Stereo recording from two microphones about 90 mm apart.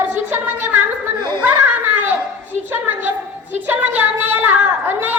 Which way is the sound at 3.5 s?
20° right (ahead or behind).